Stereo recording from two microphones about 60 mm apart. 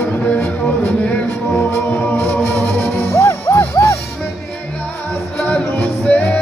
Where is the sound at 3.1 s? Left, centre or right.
Left.